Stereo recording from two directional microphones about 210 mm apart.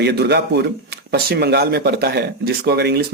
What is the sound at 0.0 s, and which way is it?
Speech, 50° right (ahead or behind).